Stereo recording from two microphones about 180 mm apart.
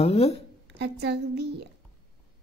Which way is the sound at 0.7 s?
70° right (ahead or behind).